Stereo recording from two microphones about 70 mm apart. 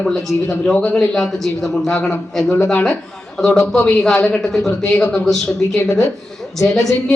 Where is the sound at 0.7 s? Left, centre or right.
Left.